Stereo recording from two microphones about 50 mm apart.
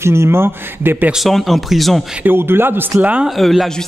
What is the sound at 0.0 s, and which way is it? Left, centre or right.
Speech, right.